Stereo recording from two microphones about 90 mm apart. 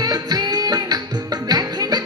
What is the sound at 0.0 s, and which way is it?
Music, 45° right (ahead or behind).